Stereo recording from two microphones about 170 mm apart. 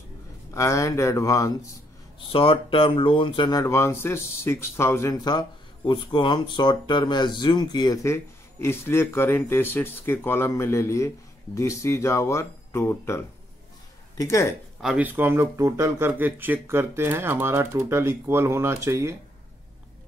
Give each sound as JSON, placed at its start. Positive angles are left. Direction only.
{"t": 0.6, "sound": "speech", "side_deg": 20}
{"t": 2.1, "sound": "speech", "side_deg": 30}
{"t": 3.6, "sound": "speech", "side_deg": 15}
{"t": 14.8, "sound": "speech", "side_deg": -5}